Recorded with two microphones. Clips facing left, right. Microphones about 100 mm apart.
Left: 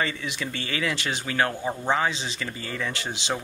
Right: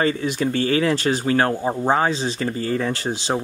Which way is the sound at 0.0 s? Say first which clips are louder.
Right 9 dB; 40° right (ahead or behind).